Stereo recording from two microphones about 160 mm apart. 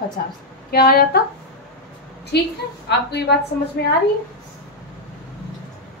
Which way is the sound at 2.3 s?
90° left.